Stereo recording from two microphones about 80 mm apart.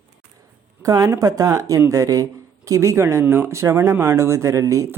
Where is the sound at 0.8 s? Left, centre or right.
Right.